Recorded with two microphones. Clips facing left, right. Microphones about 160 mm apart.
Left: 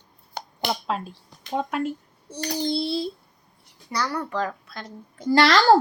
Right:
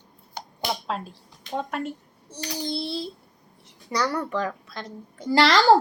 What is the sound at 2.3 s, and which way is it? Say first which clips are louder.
Child singing: left 5 dB; 50° left (ahead or behind).